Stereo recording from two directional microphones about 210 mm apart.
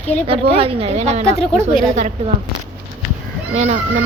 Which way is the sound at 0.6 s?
25° right (ahead or behind).